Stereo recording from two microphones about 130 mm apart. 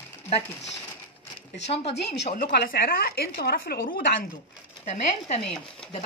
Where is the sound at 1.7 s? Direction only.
55° left (ahead or behind).